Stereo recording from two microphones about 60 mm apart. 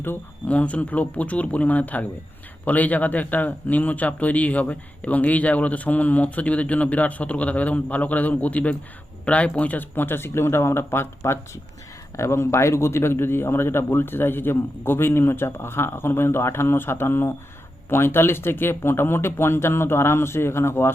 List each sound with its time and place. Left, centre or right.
0.4 s a man's voice: left